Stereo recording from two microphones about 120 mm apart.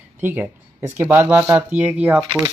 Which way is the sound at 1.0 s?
15° right (ahead or behind).